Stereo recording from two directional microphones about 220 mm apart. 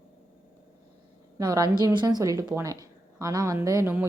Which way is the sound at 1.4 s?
15° right (ahead or behind).